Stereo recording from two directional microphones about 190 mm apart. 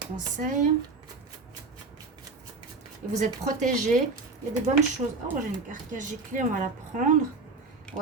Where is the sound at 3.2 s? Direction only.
40° right (ahead or behind).